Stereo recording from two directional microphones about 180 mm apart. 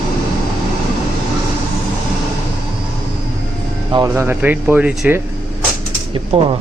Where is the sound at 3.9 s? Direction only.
20° right (ahead or behind).